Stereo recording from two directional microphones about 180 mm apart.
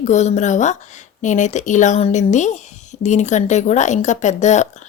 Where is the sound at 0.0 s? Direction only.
40° left (ahead or behind).